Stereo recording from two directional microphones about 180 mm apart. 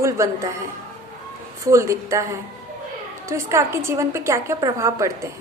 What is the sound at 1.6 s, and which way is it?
Speech, 15° right (ahead or behind).